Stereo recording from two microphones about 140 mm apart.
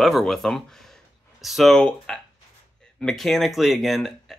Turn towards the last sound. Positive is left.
turn(degrees=0)  # may be behind; listen again after turning